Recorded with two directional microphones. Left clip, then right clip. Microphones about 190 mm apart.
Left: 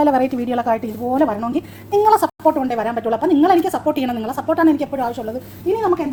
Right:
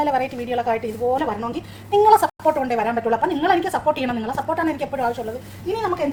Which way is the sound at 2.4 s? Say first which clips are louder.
Left 2 dB; 10° left (ahead or behind).